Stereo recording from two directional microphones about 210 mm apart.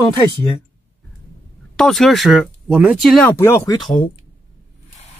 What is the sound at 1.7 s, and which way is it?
Speech, centre (ahead or behind).